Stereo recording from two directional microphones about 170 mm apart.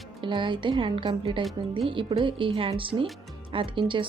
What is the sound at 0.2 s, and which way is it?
Speech, 30° right (ahead or behind).